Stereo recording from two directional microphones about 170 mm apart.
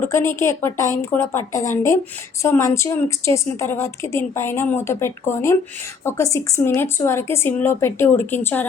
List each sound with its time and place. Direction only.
0.0 s a woman's voice: 15° left (ahead or behind)